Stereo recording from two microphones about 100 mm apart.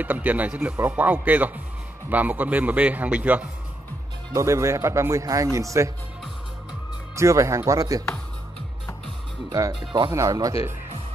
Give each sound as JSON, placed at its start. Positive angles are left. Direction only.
{"t": 0.0, "sound": "a man's voice", "side_deg": -15}
{"t": 4.3, "sound": "speech", "side_deg": -30}
{"t": 7.2, "sound": "speech", "side_deg": -30}
{"t": 9.5, "sound": "speech", "side_deg": -40}